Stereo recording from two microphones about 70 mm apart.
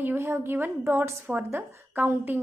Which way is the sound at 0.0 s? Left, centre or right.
Right.